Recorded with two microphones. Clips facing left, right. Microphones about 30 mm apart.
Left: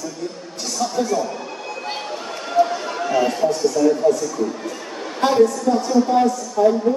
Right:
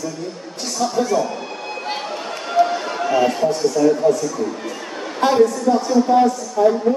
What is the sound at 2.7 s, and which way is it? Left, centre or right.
Speech, centre.